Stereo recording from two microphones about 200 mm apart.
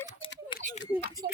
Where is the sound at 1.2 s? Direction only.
50° right (ahead or behind).